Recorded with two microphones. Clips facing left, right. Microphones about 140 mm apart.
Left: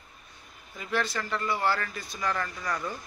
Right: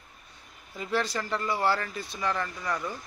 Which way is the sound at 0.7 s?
30° right (ahead or behind).